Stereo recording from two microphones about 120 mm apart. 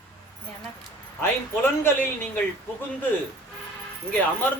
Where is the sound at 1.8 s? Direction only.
15° left (ahead or behind).